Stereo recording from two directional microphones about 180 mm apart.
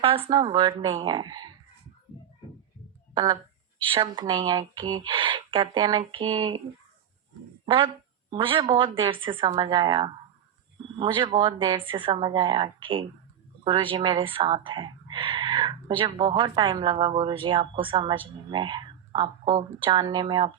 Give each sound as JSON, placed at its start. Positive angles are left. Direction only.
{"t": 0.0, "sound": "speech", "side_deg": -30}
{"t": 3.9, "sound": "speech", "side_deg": -25}
{"t": 7.6, "sound": "speech", "side_deg": -30}